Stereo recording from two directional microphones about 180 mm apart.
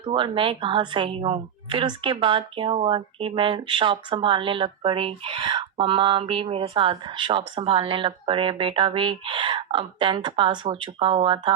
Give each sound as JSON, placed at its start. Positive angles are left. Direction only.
{"t": 0.0, "sound": "a woman's voice", "side_deg": -30}